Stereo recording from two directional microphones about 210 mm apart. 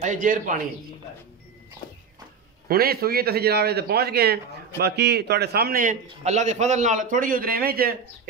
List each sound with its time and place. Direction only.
0.0 s a man's voice: 35° right (ahead or behind)
2.7 s a man's voice: 45° right (ahead or behind)